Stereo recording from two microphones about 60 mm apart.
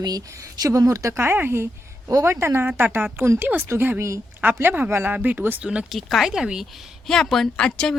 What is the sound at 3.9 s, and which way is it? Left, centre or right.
Speech, right.